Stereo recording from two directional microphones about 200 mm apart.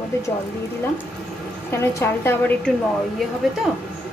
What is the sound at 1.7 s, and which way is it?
Speech, 10° left (ahead or behind).